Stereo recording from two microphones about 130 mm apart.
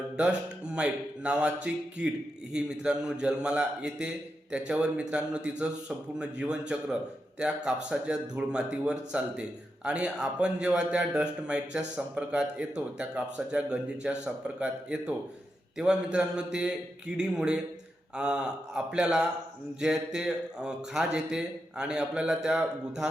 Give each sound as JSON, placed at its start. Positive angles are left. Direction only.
{"t": 0.2, "sound": "a man's voice", "side_deg": -10}